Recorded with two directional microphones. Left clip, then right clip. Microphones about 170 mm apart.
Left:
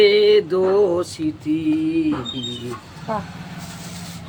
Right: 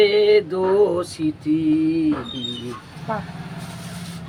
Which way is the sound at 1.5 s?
Centre (ahead or behind).